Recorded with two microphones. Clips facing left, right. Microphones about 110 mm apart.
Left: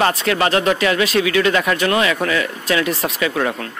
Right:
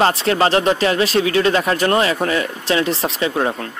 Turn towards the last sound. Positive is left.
turn(degrees=-25)  # may be behind; listen again after turning